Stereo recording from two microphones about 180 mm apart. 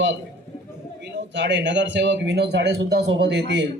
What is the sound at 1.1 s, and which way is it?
A man's voice, 75° right (ahead or behind).